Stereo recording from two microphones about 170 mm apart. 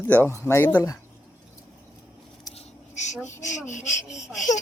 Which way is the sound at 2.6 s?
45° left (ahead or behind).